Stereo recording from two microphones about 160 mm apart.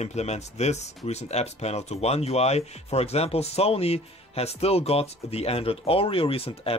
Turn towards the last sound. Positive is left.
turn(degrees=35)  # may be behind; listen again after turning